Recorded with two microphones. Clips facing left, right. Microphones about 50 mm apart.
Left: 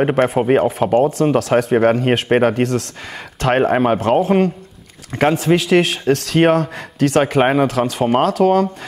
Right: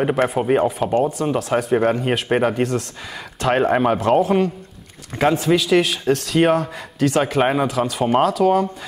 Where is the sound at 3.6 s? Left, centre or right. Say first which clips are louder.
Left 2 dB; left.